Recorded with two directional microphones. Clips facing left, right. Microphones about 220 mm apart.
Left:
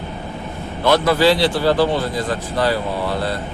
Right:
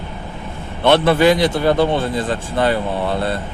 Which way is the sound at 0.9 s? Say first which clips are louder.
Right 2 dB; 25° right (ahead or behind).